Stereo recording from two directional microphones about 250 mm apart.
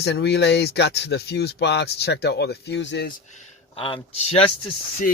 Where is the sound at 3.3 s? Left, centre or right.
Left.